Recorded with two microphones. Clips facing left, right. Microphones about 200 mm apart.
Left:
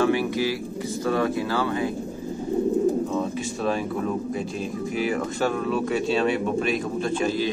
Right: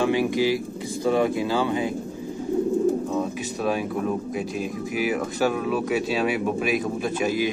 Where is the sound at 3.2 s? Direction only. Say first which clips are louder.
Even; 5° right (ahead or behind).